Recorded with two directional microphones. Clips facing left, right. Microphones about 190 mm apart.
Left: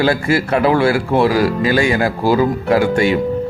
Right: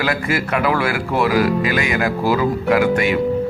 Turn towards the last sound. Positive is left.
turn(degrees=30)  # may be behind; listen again after turning